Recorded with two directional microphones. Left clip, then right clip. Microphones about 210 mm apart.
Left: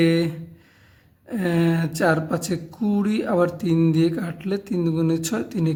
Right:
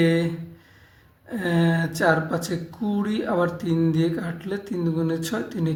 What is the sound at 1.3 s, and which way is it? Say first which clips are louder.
A woman's voice: left 1 dB; 40° left (ahead or behind).